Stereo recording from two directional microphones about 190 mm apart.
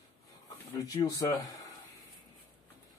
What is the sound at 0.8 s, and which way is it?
Speech, 20° left (ahead or behind).